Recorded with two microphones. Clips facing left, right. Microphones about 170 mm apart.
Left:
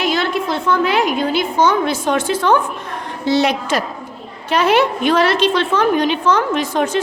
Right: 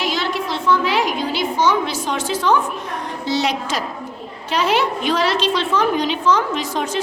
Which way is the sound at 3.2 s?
55° left (ahead or behind).